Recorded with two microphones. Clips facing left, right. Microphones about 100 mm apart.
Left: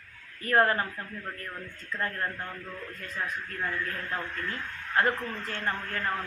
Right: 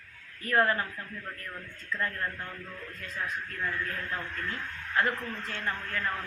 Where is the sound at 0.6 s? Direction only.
40° left (ahead or behind).